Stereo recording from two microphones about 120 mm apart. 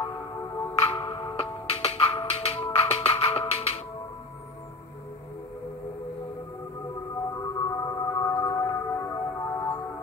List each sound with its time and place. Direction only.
0.7 s music: 45° left (ahead or behind)
7.3 s music: 30° left (ahead or behind)